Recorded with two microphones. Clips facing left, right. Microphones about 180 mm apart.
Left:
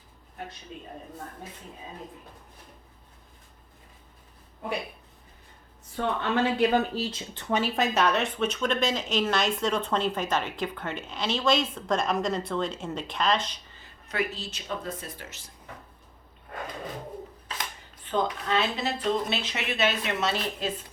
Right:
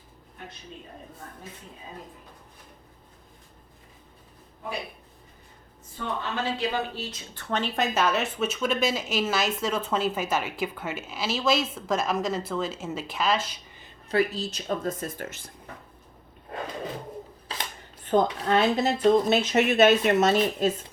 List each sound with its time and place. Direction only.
6.0 s a woman's voice: 65° left (ahead or behind)
6.4 s speech: 55° left (ahead or behind)
6.9 s speech: 30° left (ahead or behind)
7.6 s speech: centre (ahead or behind)
14.1 s speech: 35° right (ahead or behind); by 15.5 s 55° right (ahead or behind)
18.1 s speech: 45° right (ahead or behind)